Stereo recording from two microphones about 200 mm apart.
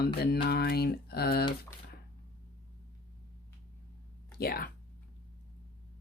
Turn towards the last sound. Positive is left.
turn(degrees=50)  # may be behind; listen again after turning